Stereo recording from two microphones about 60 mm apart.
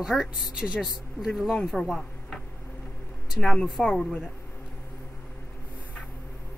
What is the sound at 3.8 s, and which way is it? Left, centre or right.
Speech, centre.